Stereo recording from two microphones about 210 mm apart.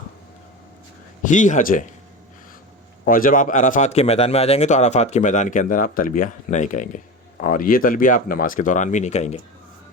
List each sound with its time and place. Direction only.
1.2 s a man's voice: 35° left (ahead or behind)
3.0 s a man's voice: 40° left (ahead or behind)